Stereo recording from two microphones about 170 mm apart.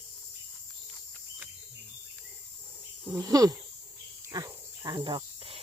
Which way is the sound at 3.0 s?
15° right (ahead or behind).